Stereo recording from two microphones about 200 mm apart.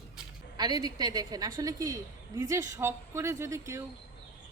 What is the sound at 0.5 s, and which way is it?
A woman's voice, 20° right (ahead or behind).